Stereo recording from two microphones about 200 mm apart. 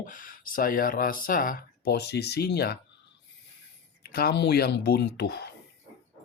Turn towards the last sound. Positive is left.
turn(degrees=55)  # may be behind; listen again after turning